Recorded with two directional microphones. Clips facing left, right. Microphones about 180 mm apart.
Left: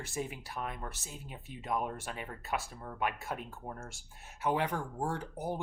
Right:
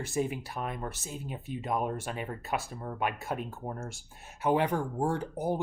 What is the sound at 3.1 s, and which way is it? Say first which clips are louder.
Speech: right 3 dB; 20° right (ahead or behind).